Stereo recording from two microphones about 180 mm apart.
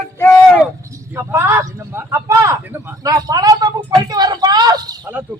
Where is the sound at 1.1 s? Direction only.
15° right (ahead or behind).